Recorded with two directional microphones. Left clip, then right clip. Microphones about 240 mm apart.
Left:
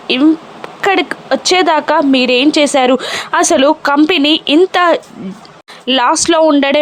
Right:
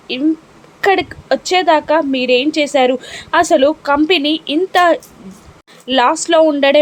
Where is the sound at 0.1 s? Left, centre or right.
Centre.